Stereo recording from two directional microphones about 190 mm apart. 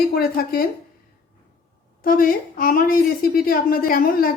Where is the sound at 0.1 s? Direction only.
55° left (ahead or behind).